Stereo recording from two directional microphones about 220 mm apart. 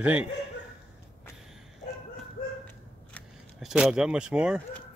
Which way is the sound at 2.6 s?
Centre (ahead or behind).